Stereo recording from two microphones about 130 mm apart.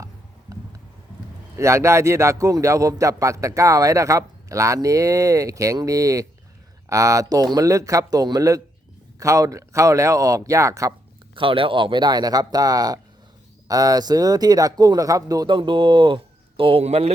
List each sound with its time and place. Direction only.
0.5 s a sound: 25° right (ahead or behind)
1.5 s a man's voice: 20° right (ahead or behind)
11.3 s speech: 40° right (ahead or behind)